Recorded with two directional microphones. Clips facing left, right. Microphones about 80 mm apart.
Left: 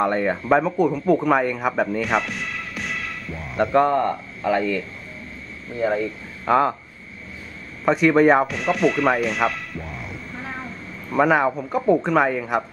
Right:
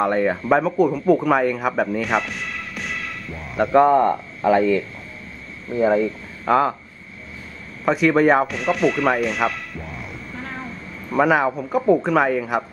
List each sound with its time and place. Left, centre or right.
0.0 s speech: centre
3.8 s speech: centre
6.4 s speech: centre
7.8 s speech: centre